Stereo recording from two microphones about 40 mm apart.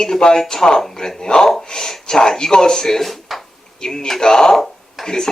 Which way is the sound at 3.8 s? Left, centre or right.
Centre.